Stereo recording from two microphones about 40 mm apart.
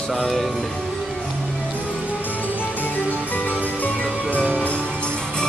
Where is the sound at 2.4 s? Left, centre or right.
Left.